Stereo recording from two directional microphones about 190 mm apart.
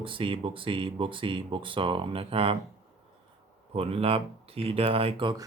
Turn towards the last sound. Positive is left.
turn(degrees=-25)  # may be behind; listen again after turning